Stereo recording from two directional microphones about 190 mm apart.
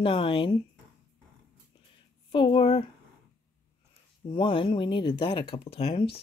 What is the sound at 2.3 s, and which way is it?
Speech, 25° left (ahead or behind).